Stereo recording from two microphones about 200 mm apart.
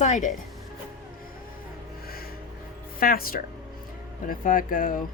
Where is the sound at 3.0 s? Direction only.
45° left (ahead or behind).